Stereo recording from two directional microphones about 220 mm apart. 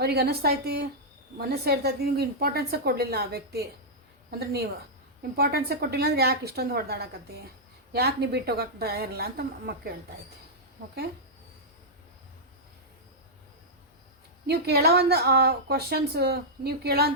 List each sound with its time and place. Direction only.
0.0 s a woman's voice: 45° right (ahead or behind)
14.4 s a woman's voice: 45° right (ahead or behind)